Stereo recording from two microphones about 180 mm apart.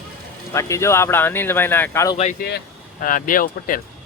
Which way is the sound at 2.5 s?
55° left (ahead or behind).